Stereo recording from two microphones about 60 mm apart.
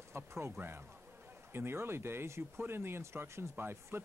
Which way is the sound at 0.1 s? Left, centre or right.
Right.